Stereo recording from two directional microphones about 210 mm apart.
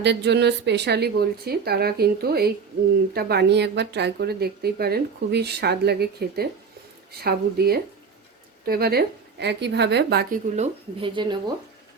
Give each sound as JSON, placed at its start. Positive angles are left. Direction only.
{"t": 0.0, "sound": "speech", "side_deg": -55}
{"t": 10.5, "sound": "speech", "side_deg": -30}